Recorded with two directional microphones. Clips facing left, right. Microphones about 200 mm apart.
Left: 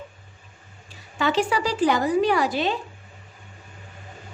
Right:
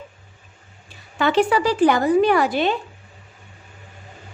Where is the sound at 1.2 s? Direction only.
55° right (ahead or behind).